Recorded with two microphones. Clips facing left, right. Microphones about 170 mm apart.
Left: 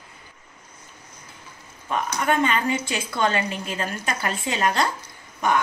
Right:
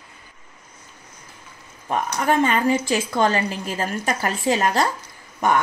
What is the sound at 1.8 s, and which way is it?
A woman's voice, 40° right (ahead or behind).